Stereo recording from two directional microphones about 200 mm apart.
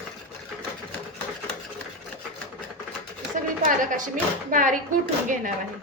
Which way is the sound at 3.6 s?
40° right (ahead or behind).